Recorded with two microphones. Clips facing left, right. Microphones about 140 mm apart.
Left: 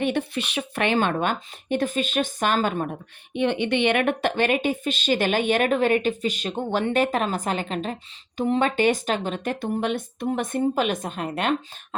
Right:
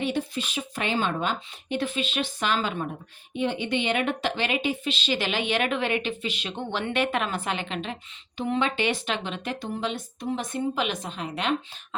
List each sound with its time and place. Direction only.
0.0 s a woman's voice: 65° left (ahead or behind); by 2.9 s 45° left (ahead or behind)
3.3 s a woman's voice: 65° left (ahead or behind)